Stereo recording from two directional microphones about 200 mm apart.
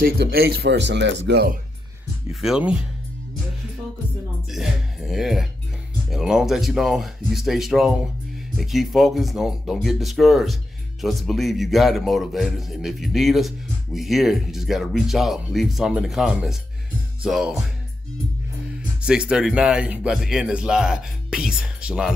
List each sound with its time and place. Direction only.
0.0 s speech: 50° right (ahead or behind)
2.4 s speech: 5° right (ahead or behind)
4.5 s music: centre (ahead or behind)
6.0 s speech: centre (ahead or behind)
18.8 s speech: 5° right (ahead or behind)